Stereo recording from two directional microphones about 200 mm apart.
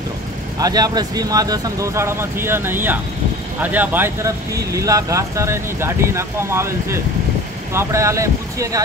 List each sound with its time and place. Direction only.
0.6 s speech: 20° right (ahead or behind)